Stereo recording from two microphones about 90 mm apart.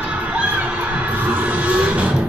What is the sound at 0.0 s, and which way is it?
Children shouting, 15° right (ahead or behind).